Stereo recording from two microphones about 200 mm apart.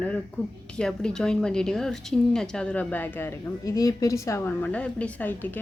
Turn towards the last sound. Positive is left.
turn(degrees=10)  # may be behind; listen again after turning